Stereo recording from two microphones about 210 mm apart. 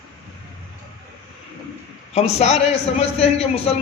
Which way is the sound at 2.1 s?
30° left (ahead or behind).